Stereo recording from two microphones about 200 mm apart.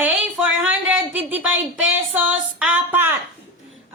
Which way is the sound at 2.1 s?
5° right (ahead or behind).